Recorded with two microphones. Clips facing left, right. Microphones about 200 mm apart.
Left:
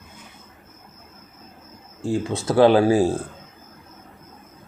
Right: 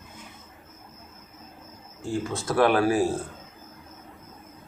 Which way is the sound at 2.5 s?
25° left (ahead or behind).